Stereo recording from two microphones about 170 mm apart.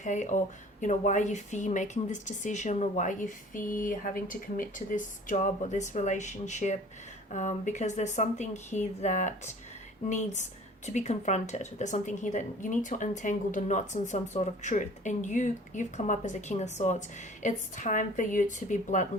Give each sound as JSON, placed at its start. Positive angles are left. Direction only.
{"t": 0.0, "sound": "a woman's voice", "side_deg": 45}